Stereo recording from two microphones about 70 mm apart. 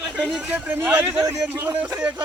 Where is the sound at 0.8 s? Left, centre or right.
Right.